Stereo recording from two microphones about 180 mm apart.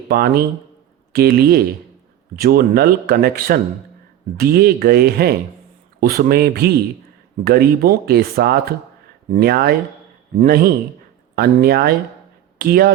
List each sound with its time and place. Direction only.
0.1 s speech: 55° right (ahead or behind)